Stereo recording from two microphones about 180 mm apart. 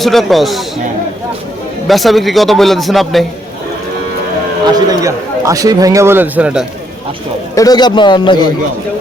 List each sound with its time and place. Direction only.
0.0 s speech: centre (ahead or behind)
1.9 s speech: centre (ahead or behind)
4.7 s a man's voice: 20° right (ahead or behind)
7.5 s a man's voice: 20° left (ahead or behind)